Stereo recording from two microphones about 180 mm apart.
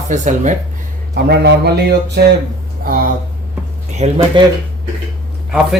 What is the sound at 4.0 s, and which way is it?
Speech, 30° right (ahead or behind).